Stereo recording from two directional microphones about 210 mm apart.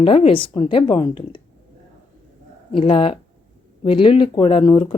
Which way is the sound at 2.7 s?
25° left (ahead or behind).